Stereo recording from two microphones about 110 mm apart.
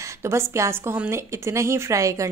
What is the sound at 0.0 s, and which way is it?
A woman's voice, 25° right (ahead or behind).